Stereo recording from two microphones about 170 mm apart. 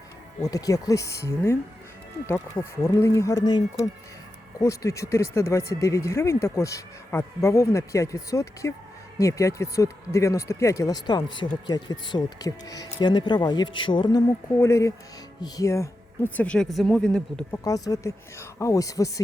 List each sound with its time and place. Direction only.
0.4 s speech: 20° left (ahead or behind); by 17.6 s 5° left (ahead or behind)
17.6 s speech: 20° left (ahead or behind)